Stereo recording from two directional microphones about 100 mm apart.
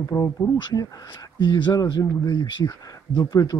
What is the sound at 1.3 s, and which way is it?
Speech, 50° left (ahead or behind).